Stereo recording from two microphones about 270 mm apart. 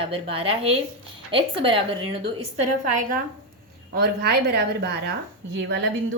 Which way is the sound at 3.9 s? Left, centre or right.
Right.